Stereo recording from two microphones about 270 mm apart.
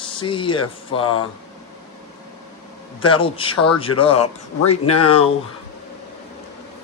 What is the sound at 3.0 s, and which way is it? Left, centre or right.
A man's voice, centre.